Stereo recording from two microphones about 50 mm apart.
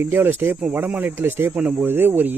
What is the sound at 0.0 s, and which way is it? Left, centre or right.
Speech, right.